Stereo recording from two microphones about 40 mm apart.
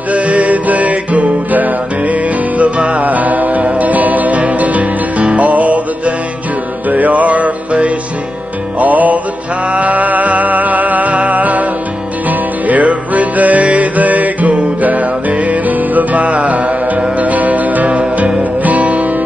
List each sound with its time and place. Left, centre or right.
0.1 s music: right